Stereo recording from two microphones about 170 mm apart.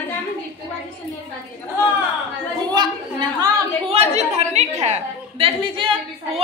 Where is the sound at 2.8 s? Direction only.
25° right (ahead or behind).